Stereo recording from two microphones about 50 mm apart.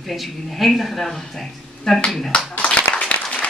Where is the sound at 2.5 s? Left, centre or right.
Left.